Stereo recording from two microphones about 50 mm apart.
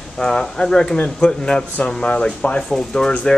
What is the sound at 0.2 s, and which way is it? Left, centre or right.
Speech, centre.